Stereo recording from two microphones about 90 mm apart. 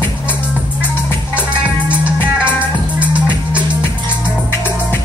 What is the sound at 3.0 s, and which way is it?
Music, 15° right (ahead or behind).